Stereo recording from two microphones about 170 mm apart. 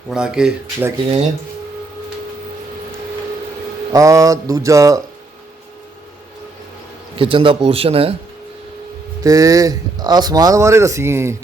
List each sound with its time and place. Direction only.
0.1 s speech: 5° right (ahead or behind)
3.9 s speech: 20° right (ahead or behind)
7.2 s speech: 30° right (ahead or behind)
9.2 s speech: 20° right (ahead or behind)